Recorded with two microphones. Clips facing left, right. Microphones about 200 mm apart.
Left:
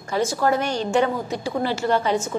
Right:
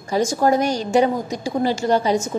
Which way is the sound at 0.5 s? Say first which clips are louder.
Right 3 dB; 40° right (ahead or behind).